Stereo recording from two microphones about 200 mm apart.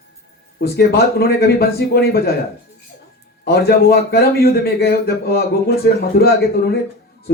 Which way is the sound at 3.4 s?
50° left (ahead or behind).